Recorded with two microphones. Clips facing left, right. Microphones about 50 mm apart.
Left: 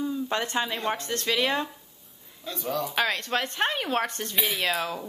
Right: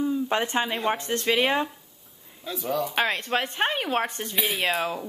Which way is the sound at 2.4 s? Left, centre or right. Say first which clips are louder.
Right 2 dB; centre.